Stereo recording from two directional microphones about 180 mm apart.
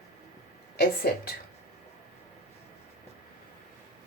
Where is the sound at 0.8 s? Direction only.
60° left (ahead or behind).